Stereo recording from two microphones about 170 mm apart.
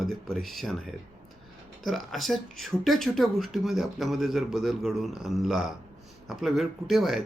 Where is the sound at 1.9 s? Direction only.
Centre (ahead or behind).